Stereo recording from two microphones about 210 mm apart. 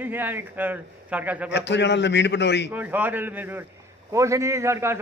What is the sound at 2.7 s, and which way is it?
A man's voice, 10° right (ahead or behind).